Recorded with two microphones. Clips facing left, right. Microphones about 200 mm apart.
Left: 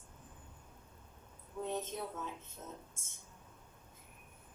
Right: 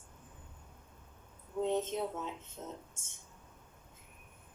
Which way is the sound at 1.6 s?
20° right (ahead or behind).